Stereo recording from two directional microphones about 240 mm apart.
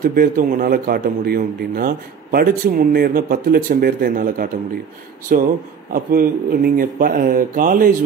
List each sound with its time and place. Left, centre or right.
0.0 s a man's voice: right